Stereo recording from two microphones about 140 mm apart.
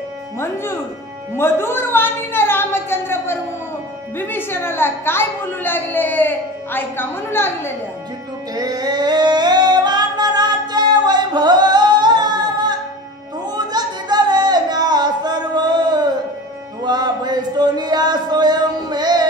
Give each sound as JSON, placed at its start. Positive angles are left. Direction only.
{"t": 1.3, "sound": "a woman's voice", "side_deg": 15}
{"t": 8.5, "sound": "singing", "side_deg": -30}
{"t": 13.5, "sound": "a sound", "side_deg": -30}